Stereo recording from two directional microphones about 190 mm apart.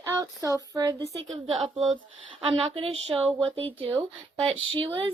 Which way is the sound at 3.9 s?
15° right (ahead or behind).